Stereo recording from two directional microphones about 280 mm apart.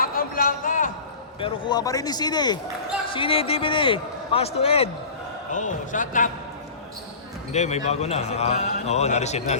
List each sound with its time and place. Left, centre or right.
0.0 s a sound: left
1.4 s a man's voice: centre
7.5 s a man's voice: left